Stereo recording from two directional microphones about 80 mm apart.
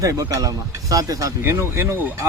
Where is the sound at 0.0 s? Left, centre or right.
Right.